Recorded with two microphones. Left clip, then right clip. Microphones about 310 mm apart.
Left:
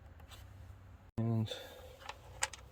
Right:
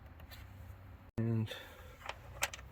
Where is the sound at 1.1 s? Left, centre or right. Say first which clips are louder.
Even; centre.